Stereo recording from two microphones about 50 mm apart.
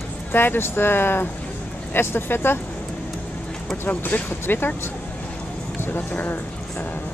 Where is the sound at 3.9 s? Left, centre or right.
Left.